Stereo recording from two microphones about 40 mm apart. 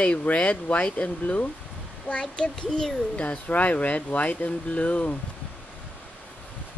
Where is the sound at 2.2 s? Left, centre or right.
Centre.